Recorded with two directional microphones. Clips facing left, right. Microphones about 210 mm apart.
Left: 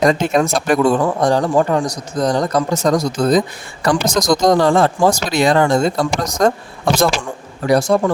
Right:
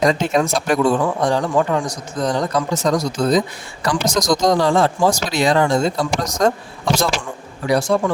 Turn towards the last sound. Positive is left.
turn(degrees=45)  # may be behind; listen again after turning